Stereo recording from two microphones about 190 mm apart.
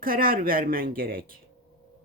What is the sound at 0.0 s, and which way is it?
Speech, 50° right (ahead or behind).